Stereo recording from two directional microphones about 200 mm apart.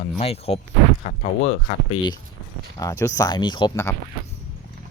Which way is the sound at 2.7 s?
15° left (ahead or behind).